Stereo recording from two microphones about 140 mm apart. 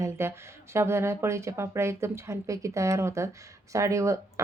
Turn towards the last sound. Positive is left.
turn(degrees=-20)  # may be behind; listen again after turning